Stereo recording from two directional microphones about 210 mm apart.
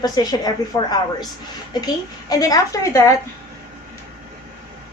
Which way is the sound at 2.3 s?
15° left (ahead or behind).